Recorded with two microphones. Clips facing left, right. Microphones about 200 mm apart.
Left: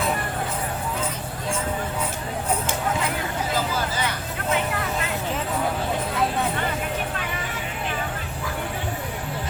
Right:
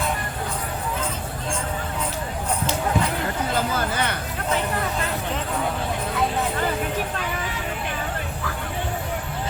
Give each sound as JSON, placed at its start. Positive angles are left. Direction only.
{"t": 3.8, "sound": "hubbub", "side_deg": -55}